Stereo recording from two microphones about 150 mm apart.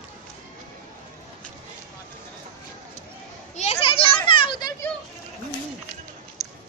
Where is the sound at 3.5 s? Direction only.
45° left (ahead or behind); by 4.7 s 30° left (ahead or behind).